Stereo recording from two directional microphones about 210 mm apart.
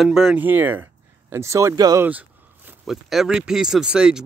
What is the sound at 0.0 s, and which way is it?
Speech, centre (ahead or behind).